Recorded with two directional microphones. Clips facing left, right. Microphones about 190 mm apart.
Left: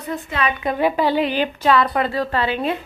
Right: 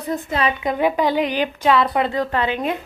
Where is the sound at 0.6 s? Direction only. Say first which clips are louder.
Left 2 dB; 15° right (ahead or behind).